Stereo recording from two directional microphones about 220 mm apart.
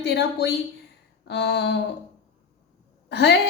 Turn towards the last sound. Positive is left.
turn(degrees=50)  # may be behind; listen again after turning